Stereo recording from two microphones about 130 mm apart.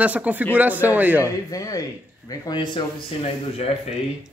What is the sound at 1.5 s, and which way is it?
Speech, 25° left (ahead or behind).